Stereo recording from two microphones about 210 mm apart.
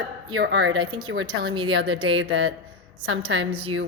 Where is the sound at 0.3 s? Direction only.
55° right (ahead or behind).